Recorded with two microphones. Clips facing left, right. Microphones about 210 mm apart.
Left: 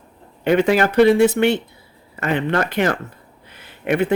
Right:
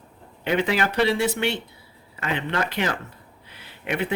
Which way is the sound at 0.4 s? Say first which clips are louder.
Left 7 dB; 45° left (ahead or behind).